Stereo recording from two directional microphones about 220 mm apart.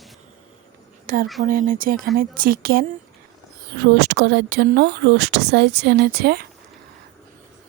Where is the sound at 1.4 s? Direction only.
40° right (ahead or behind).